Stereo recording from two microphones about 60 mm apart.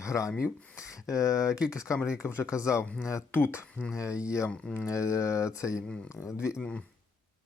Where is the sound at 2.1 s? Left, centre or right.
Left.